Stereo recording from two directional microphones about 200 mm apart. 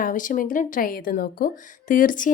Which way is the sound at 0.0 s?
40° left (ahead or behind).